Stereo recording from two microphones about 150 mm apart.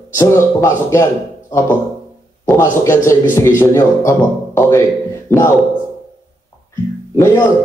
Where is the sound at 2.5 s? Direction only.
15° left (ahead or behind).